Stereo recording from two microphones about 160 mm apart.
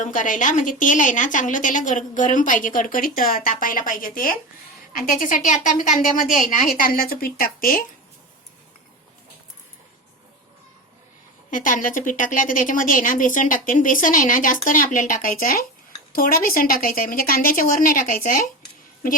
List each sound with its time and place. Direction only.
0.0 s a woman's voice: 55° left (ahead or behind)
11.5 s a woman's voice: 55° left (ahead or behind)